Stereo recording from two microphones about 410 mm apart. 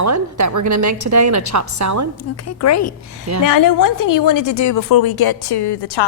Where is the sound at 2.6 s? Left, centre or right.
Left.